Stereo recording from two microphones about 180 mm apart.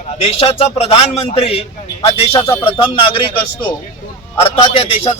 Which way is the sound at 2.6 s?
25° left (ahead or behind).